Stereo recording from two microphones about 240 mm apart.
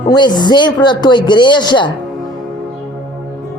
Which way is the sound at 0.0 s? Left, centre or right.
Centre.